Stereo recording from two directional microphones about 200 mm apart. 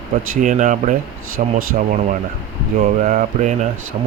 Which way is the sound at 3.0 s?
35° right (ahead or behind).